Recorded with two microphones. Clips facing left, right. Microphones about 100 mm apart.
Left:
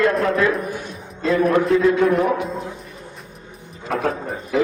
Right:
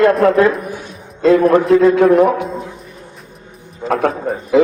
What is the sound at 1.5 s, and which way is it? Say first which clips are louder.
Speech: right 6 dB; 80° right.